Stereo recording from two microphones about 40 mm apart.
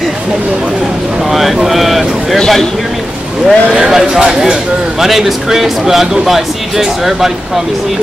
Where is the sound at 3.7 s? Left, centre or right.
Centre.